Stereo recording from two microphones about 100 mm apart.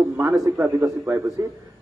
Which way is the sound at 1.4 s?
35° right (ahead or behind).